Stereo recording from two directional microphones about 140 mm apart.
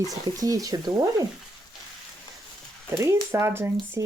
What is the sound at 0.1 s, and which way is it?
Speech, 25° right (ahead or behind).